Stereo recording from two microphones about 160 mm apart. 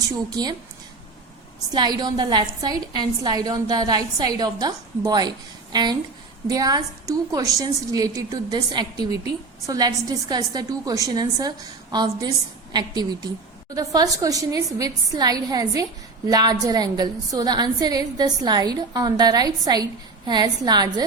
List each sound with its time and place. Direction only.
0.3 s a woman's voice: 25° right (ahead or behind)
1.7 s a woman's voice: 25° right (ahead or behind)